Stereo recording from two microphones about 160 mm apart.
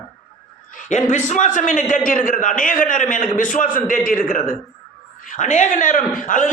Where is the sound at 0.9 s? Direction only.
50° left (ahead or behind).